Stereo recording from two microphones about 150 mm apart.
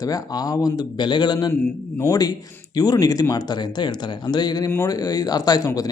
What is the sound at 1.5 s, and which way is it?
A man's voice, 15° left (ahead or behind).